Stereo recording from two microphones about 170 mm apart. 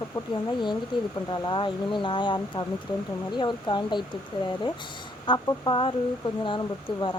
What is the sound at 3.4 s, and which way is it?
Speech, 25° left (ahead or behind).